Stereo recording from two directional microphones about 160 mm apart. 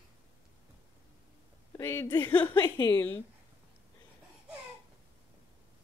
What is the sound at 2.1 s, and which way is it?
Speech, 15° left (ahead or behind).